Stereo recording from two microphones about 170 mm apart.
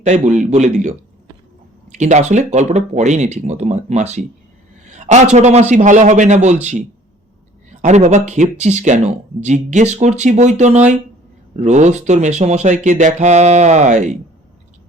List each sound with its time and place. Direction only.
0.0 s speech: 45° right (ahead or behind)
2.0 s speech: 45° right (ahead or behind)
7.7 s speech: 45° right (ahead or behind)